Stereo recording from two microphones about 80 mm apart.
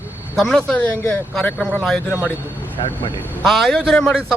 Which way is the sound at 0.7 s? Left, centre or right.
Left.